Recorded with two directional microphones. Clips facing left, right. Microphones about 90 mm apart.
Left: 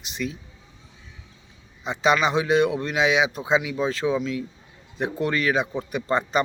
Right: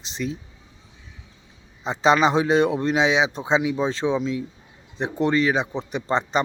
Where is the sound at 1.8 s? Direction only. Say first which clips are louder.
Right 3 dB; 30° right (ahead or behind).